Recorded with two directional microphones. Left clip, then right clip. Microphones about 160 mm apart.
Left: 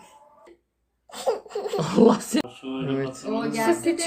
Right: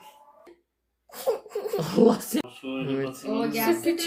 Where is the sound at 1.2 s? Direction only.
15° right (ahead or behind).